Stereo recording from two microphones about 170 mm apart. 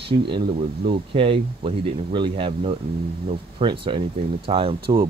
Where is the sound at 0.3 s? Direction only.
30° right (ahead or behind).